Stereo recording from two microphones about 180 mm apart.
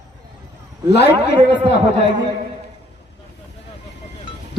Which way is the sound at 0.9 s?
65° left (ahead or behind).